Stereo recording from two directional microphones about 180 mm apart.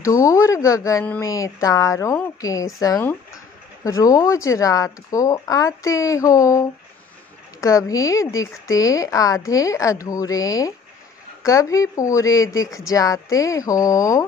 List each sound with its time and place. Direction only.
0.0 s a woman's voice: 15° left (ahead or behind)